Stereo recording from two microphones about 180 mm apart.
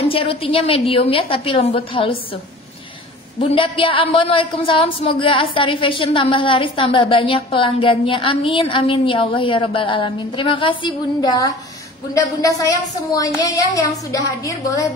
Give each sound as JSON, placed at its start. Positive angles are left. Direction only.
{"t": 0.1, "sound": "a woman's voice", "side_deg": 30}
{"t": 3.3, "sound": "a woman's voice", "side_deg": 30}